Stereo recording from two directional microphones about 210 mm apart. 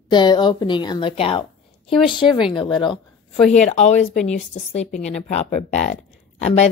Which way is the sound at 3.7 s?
35° left (ahead or behind).